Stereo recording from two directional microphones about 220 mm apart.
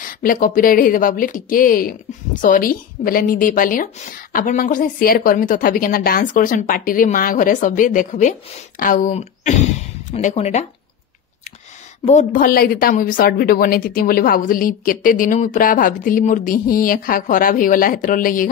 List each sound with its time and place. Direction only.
0.0 s a woman's voice: 40° left (ahead or behind)
12.0 s a woman's voice: 30° left (ahead or behind)